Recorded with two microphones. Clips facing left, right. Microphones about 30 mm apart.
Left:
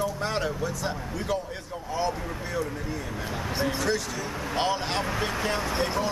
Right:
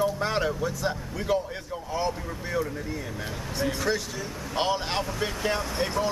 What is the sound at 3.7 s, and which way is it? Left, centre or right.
A man's voice, centre.